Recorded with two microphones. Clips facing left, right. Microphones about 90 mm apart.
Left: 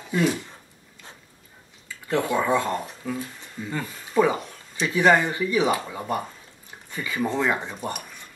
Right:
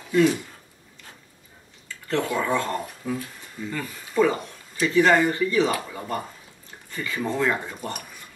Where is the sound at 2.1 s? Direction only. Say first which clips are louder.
Left 2 dB; 20° left (ahead or behind).